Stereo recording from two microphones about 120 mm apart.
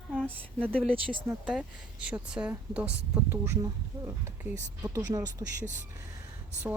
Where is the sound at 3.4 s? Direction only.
25° right (ahead or behind).